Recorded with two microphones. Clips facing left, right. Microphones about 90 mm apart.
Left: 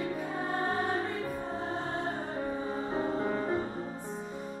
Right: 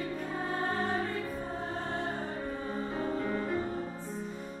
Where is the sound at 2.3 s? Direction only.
15° left (ahead or behind).